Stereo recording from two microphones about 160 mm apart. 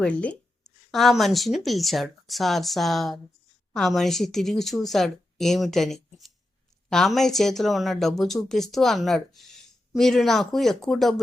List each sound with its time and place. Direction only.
0.0 s speech: 5° left (ahead or behind)